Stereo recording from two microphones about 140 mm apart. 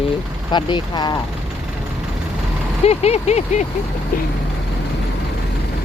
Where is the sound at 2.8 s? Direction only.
50° left (ahead or behind).